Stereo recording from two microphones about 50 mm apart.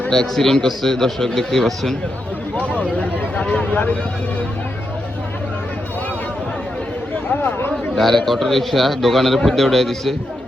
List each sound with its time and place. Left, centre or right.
0.1 s a man's voice: centre
2.6 s a sound: left
7.9 s a man's voice: centre